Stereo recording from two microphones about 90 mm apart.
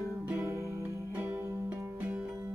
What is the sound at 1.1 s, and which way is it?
Music, 25° right (ahead or behind).